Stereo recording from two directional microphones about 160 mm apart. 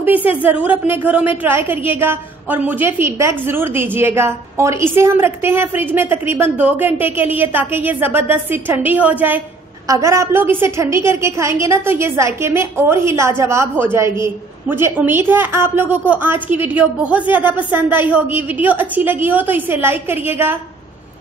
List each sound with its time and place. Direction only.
0.0 s a woman's voice: 10° right (ahead or behind)